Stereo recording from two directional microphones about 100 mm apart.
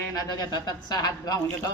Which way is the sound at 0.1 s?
40° left (ahead or behind).